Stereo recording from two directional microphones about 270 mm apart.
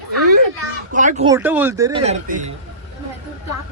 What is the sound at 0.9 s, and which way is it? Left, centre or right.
Speech, right.